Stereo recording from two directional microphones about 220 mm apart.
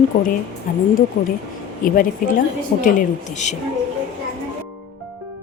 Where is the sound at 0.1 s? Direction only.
35° left (ahead or behind).